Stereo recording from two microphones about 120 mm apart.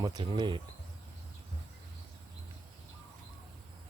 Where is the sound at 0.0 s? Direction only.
35° right (ahead or behind).